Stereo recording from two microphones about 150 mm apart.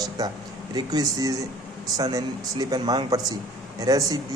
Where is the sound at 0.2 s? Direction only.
25° right (ahead or behind).